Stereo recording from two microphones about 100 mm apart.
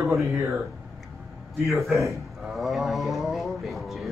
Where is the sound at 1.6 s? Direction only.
Centre (ahead or behind).